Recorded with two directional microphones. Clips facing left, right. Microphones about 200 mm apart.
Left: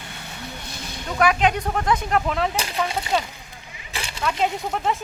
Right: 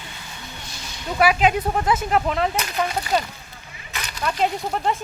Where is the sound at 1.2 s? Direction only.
5° right (ahead or behind).